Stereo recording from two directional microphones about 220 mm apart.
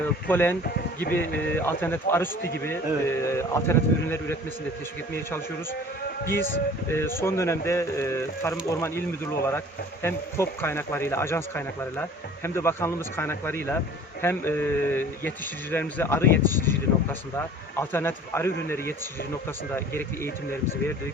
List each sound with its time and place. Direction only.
0.0 s speech: 10° left (ahead or behind)
6.8 s speech: 10° left (ahead or behind)